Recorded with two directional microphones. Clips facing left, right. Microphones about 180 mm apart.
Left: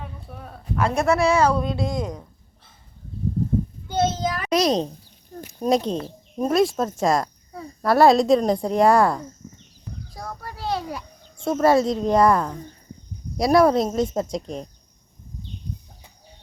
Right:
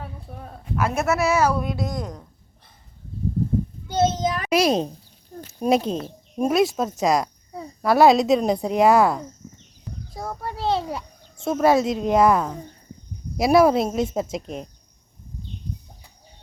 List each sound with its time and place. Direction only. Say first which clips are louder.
0.8 s a woman's voice: left 2 dB; 5° right (ahead or behind)
1.8 s speech: left 3 dB; 20° left (ahead or behind)
4.1 s a child's voice: right 2 dB; 20° right (ahead or behind)
4.4 s a woman's voice: even; 10° right (ahead or behind)
10.1 s a sound: right 5 dB; 25° right (ahead or behind)
11.4 s a woman's voice: left 1 dB; centre (ahead or behind)